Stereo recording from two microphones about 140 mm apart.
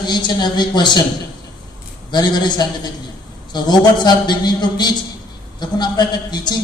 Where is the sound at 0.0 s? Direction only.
30° left (ahead or behind).